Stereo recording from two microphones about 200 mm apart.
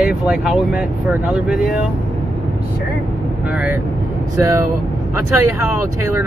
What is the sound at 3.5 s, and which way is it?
Speech, 5° right (ahead or behind).